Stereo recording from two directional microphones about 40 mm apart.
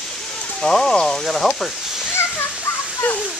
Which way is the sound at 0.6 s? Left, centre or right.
Centre.